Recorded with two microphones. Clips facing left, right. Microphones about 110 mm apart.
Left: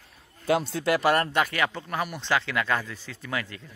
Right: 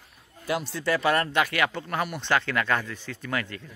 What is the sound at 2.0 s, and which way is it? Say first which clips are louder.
Speech: right 1 dB; 5° left (ahead or behind).